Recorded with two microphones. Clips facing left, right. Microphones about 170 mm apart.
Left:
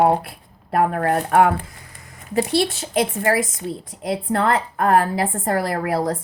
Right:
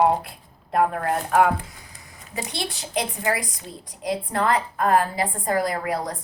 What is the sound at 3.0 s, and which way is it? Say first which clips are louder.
Speech: left 6 dB; 55° left (ahead or behind).